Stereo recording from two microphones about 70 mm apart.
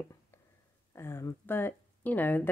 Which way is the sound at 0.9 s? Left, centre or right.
Left.